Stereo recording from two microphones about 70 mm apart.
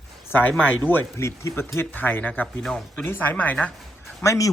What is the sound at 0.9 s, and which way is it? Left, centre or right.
Speech, left.